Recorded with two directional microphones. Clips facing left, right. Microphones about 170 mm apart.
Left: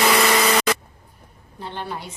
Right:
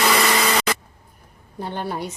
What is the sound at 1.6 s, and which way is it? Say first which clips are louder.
Speech: right 4 dB; 45° right (ahead or behind).